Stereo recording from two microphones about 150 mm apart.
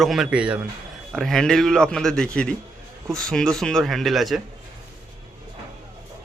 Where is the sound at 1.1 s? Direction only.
5° left (ahead or behind).